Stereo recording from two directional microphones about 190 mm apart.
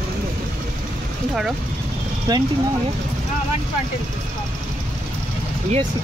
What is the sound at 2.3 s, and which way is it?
Speech, 20° right (ahead or behind).